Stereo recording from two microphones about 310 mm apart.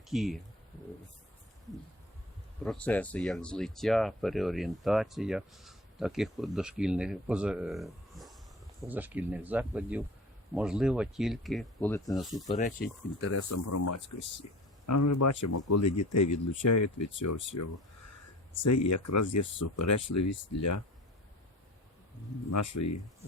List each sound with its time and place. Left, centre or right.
0.1 s speech: centre
2.6 s speech: centre
12.5 s speech: left
13.3 s speech: left
22.4 s speech: left